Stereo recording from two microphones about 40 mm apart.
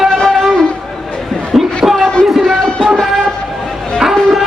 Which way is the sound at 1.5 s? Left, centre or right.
Centre.